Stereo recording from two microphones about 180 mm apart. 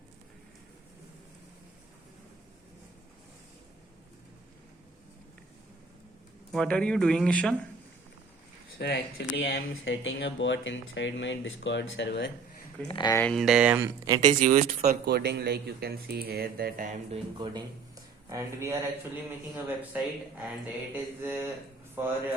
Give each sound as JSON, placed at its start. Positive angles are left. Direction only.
{"t": 6.5, "sound": "speech", "side_deg": 5}
{"t": 8.8, "sound": "speech", "side_deg": 85}
{"t": 12.9, "sound": "speech", "side_deg": 25}
{"t": 13.1, "sound": "speech", "side_deg": 5}
{"t": 14.2, "sound": "speech", "side_deg": -45}
{"t": 15.0, "sound": "speech", "side_deg": -65}
{"t": 17.1, "sound": "speech", "side_deg": -25}
{"t": 19.6, "sound": "mantra", "side_deg": -10}